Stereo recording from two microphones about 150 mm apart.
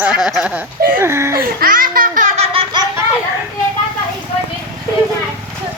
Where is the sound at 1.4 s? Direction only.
70° right (ahead or behind).